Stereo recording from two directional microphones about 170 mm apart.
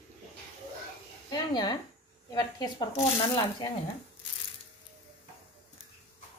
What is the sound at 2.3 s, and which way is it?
Speech, 25° left (ahead or behind).